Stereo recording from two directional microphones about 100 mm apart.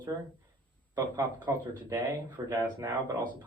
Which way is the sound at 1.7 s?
35° right (ahead or behind).